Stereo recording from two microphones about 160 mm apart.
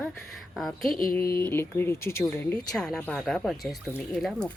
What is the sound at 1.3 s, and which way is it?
A woman's voice, 15° left (ahead or behind).